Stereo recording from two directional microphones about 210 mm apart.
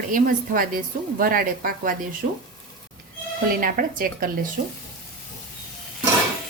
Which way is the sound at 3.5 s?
40° right (ahead or behind).